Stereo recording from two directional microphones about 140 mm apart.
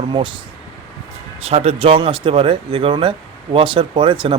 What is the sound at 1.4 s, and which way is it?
Speech, 45° right (ahead or behind).